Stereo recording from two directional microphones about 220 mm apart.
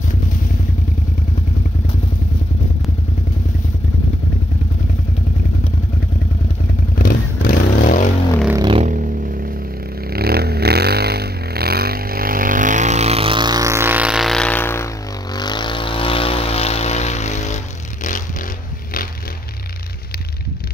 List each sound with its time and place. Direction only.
7.0 s vehicle: 40° left (ahead or behind)
8.5 s vehicle: 20° right (ahead or behind)
8.8 s vehicle: 40° right (ahead or behind); by 17.6 s 30° left (ahead or behind)